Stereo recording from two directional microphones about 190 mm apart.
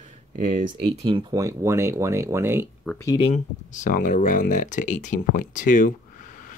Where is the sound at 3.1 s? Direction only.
35° left (ahead or behind).